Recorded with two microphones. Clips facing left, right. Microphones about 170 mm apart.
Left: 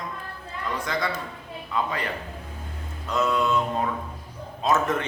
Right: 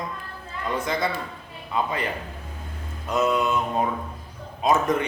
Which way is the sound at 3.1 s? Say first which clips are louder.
Right 1 dB; 20° right (ahead or behind).